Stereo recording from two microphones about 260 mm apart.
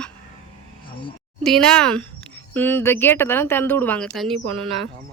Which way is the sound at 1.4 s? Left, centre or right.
Centre.